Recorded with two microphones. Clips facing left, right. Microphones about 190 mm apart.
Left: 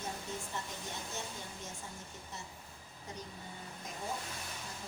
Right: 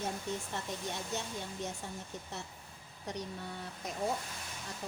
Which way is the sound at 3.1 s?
80° right.